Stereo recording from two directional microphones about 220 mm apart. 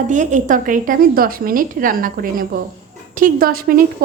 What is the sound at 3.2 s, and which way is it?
Speech, 40° right (ahead or behind).